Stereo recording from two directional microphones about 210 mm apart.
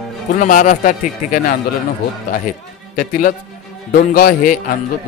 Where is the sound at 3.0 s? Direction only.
40° left (ahead or behind).